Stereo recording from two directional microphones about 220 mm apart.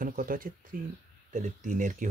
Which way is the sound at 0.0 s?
40° right (ahead or behind).